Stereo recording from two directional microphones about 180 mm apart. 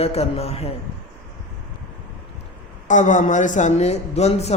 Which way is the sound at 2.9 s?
45° left (ahead or behind).